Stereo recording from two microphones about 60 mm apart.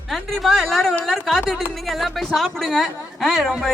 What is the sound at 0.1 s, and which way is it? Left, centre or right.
A woman's voice, centre.